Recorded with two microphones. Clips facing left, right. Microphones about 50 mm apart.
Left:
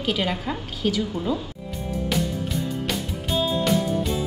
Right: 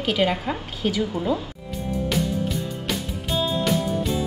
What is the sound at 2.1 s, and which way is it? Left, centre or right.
Music, centre.